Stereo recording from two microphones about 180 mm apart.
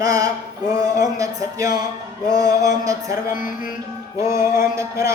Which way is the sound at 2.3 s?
20° right (ahead or behind).